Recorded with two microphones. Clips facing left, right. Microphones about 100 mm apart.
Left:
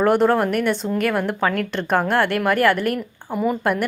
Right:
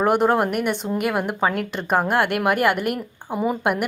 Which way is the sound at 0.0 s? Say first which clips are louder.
Left 2 dB; 15° right (ahead or behind).